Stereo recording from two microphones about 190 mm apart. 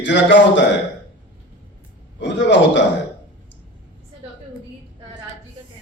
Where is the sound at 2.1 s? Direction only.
70° left (ahead or behind).